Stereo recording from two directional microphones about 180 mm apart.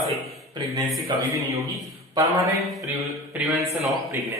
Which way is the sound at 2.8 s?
15° right (ahead or behind).